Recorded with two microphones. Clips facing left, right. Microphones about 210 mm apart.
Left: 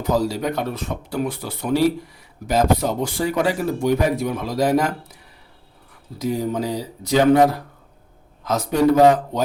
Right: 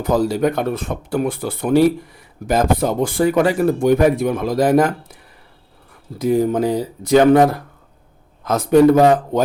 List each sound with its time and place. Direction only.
0.0 s speech: 55° right (ahead or behind)
6.1 s a man's voice: 55° right (ahead or behind)